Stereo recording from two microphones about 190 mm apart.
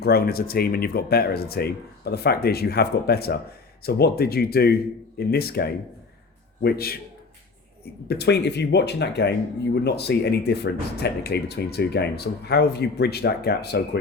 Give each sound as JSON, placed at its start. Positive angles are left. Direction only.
{"t": 0.0, "sound": "speech", "side_deg": 55}
{"t": 8.0, "sound": "speech", "side_deg": 60}